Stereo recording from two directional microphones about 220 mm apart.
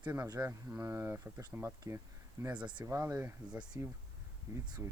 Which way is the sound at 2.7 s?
15° right (ahead or behind).